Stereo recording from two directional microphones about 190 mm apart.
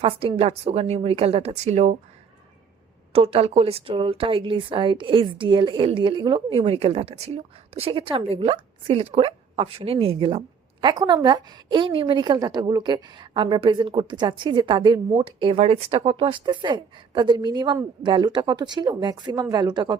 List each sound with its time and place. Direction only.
0.0 s a woman's voice: 30° right (ahead or behind)
3.1 s a woman's voice: 30° right (ahead or behind)